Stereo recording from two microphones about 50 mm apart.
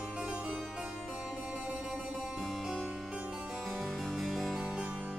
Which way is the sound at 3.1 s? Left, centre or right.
Centre.